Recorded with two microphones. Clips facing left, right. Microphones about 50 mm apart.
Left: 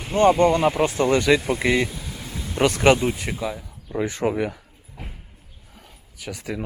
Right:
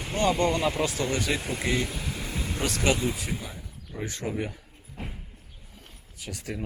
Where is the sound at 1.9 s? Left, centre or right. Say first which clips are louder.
Right 1 dB; right.